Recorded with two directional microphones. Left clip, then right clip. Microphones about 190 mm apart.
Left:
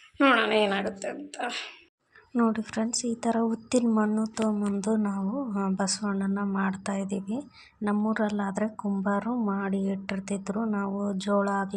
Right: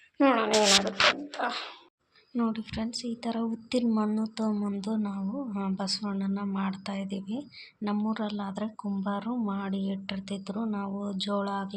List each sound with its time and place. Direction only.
0.2 s speech: centre (ahead or behind)
2.3 s a woman's voice: 25° left (ahead or behind)
3.8 s a woman's voice: 15° left (ahead or behind)